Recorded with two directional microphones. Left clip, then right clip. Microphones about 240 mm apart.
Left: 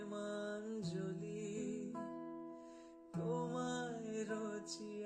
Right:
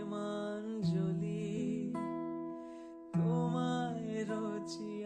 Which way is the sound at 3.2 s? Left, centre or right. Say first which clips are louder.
Right 4 dB; right.